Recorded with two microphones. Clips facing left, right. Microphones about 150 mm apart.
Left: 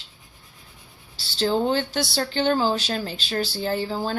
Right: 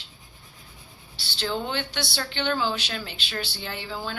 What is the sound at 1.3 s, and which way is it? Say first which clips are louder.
A woman's voice: left 7 dB; 40° left (ahead or behind).